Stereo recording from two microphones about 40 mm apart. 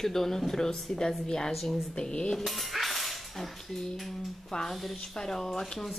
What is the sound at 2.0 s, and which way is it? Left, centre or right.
Cutlery, left.